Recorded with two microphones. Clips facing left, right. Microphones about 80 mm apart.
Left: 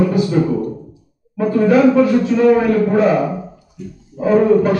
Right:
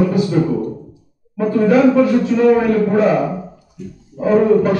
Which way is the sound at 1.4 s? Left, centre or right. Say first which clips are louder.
Even; centre.